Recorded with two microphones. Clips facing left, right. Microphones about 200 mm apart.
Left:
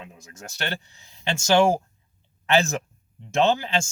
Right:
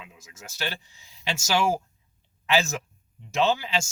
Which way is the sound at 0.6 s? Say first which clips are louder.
Left 2 dB; 60° left (ahead or behind).